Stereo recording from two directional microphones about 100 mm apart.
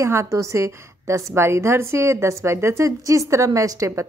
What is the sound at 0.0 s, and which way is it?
A woman's voice, 30° right (ahead or behind).